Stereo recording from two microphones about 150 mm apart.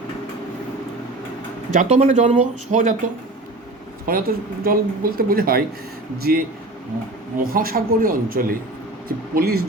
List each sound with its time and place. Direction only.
1.7 s speech: 55° right (ahead or behind)
4.0 s speech: 75° right (ahead or behind)
9.0 s speech: 85° right